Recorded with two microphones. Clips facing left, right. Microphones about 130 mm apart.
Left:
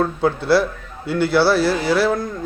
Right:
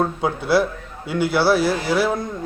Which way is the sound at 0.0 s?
10° right (ahead or behind).